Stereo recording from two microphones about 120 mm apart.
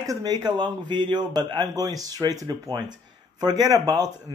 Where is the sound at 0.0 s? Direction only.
30° right (ahead or behind).